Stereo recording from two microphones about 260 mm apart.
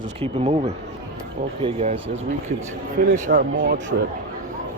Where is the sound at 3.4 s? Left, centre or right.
Right.